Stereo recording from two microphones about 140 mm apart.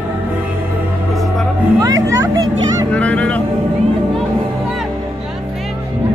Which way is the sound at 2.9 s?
10° left (ahead or behind).